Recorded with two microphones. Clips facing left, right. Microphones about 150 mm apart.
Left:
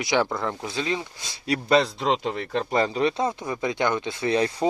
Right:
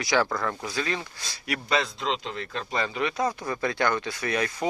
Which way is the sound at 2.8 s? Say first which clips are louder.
Left 4 dB; 30° left (ahead or behind).